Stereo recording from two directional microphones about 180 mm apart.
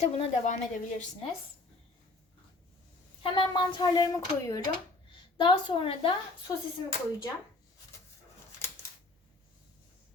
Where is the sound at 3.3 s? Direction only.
25° left (ahead or behind).